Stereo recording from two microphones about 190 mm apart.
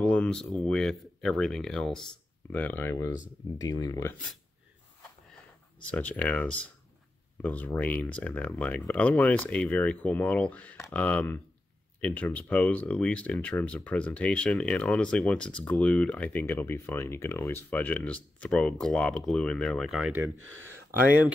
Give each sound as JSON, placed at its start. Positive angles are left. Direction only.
{"t": 0.0, "sound": "speech", "side_deg": 5}
{"t": 5.9, "sound": "speech", "side_deg": 10}
{"t": 20.3, "sound": "speech", "side_deg": -90}